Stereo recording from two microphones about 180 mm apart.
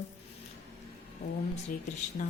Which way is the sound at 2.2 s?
40° left (ahead or behind).